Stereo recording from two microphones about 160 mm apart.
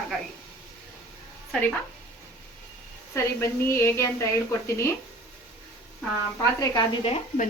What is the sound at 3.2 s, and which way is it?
A woman's voice, 15° left (ahead or behind).